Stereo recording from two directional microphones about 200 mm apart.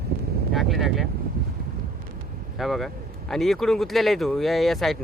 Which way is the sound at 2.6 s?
Centre (ahead or behind).